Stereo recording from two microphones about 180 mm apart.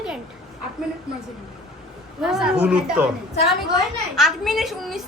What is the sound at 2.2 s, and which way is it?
Speech, 5° right (ahead or behind).